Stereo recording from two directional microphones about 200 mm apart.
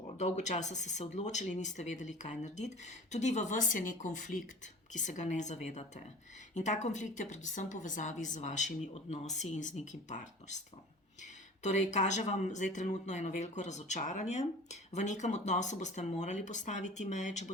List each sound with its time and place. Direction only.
0.2 s speech: 35° left (ahead or behind)